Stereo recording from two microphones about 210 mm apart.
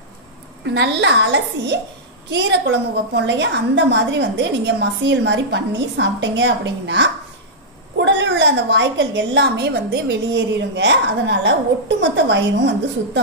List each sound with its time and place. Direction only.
0.7 s a woman's voice: 55° right (ahead or behind)